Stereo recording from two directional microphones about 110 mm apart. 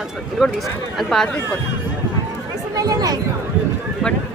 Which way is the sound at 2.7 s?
35° right (ahead or behind).